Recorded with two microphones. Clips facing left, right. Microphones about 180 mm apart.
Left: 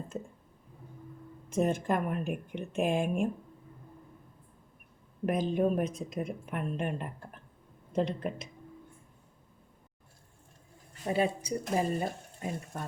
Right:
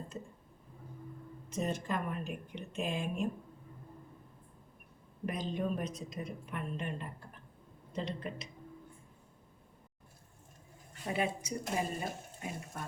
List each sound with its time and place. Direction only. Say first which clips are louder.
1.5 s a woman's voice: left 7 dB; 50° left (ahead or behind)
5.2 s a woman's voice: left 8 dB; 55° left (ahead or behind)
11.1 s speech: left 5 dB; 35° left (ahead or behind)